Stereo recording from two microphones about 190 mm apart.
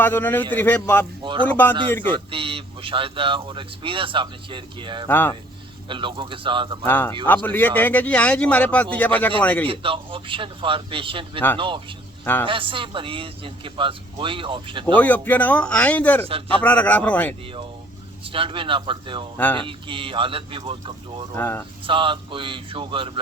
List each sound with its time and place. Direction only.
0.0 s a man's voice: 10° left (ahead or behind)
1.2 s speech: 25° right (ahead or behind)
1.5 s a man's voice: 10° left (ahead or behind)
2.1 s speech: 30° right (ahead or behind)
5.0 s a man's voice: 10° left (ahead or behind)
5.9 s speech: 25° right (ahead or behind)
6.8 s a man's voice: 10° left (ahead or behind)
9.6 s speech: 30° right (ahead or behind)
12.2 s a man's voice: 10° left (ahead or behind)
12.5 s speech: 25° right (ahead or behind)
14.9 s a man's voice: 10° left (ahead or behind)
18.3 s speech: 30° right (ahead or behind)
21.3 s a man's voice: 10° left (ahead or behind)
21.8 s speech: 25° right (ahead or behind)